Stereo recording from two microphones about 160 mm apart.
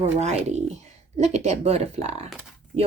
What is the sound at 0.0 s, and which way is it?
Speech, 45° right (ahead or behind).